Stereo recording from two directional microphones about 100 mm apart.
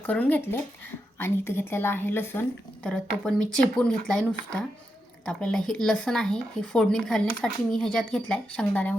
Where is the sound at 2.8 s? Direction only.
5° left (ahead or behind).